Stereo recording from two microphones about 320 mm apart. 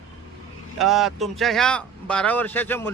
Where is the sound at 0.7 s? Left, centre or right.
Centre.